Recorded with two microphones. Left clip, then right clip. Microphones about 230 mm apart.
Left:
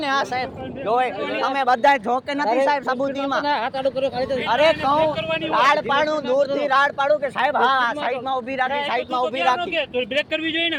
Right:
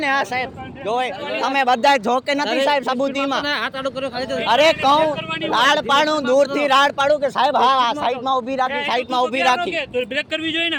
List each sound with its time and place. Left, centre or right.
0.0 s speech: right